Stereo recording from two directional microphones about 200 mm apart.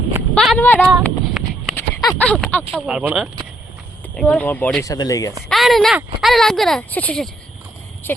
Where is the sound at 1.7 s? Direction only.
20° left (ahead or behind).